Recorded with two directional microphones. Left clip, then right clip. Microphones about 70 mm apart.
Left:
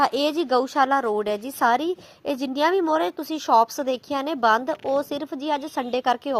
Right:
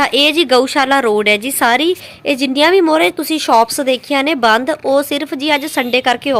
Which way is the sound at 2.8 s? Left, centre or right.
Left.